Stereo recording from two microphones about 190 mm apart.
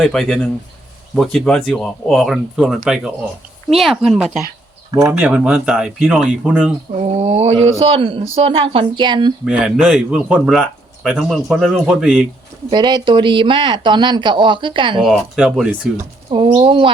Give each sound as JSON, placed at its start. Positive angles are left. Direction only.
{"t": 0.0, "sound": "speech", "side_deg": 0}
{"t": 4.9, "sound": "speech", "side_deg": -10}
{"t": 6.9, "sound": "speech", "side_deg": -35}
{"t": 9.4, "sound": "speech", "side_deg": -5}
{"t": 12.7, "sound": "speech", "side_deg": -25}
{"t": 15.0, "sound": "speech", "side_deg": 0}
{"t": 16.3, "sound": "speech", "side_deg": -25}